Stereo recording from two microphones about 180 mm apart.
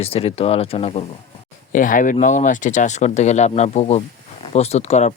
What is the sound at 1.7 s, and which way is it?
Speech, 45° left (ahead or behind).